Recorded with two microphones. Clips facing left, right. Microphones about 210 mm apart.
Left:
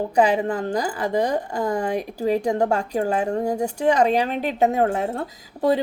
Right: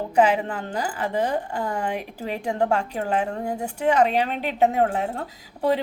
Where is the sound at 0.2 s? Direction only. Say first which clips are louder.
Left 1 dB; 40° left (ahead or behind).